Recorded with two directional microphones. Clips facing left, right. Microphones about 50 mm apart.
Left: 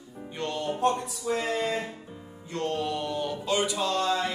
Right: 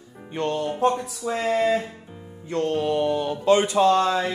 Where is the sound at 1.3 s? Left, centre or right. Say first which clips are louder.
Right 5 dB; right.